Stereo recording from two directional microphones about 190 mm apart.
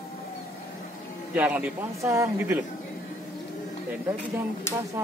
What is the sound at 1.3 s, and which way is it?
A man's voice, 10° right (ahead or behind).